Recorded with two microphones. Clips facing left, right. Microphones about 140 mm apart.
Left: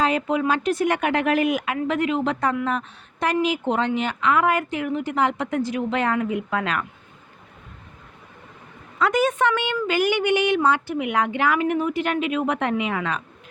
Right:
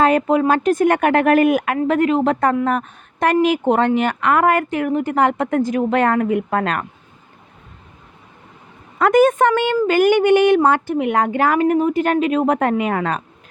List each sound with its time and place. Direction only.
0.0 s a woman's voice: 50° right (ahead or behind)
9.0 s a woman's voice: 50° right (ahead or behind)